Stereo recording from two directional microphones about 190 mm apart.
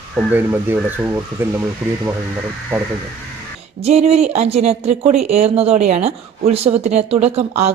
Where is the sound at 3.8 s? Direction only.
35° right (ahead or behind).